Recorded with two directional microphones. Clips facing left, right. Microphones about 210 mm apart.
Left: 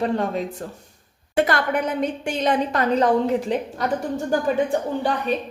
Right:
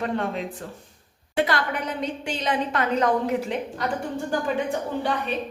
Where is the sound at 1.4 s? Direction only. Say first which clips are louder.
Left 4 dB; 50° left (ahead or behind).